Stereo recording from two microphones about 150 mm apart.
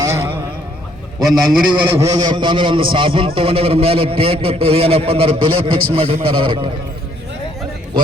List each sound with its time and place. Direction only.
0.0 s a sound: 15° right (ahead or behind)
1.5 s a man's voice: 5° right (ahead or behind)
2.0 s a man's voice: 25° right (ahead or behind)